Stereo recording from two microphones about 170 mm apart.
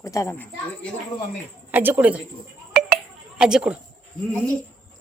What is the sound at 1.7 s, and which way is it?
Speech, 10° right (ahead or behind).